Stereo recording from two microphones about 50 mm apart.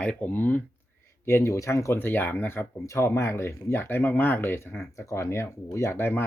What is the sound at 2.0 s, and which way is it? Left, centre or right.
Speech, left.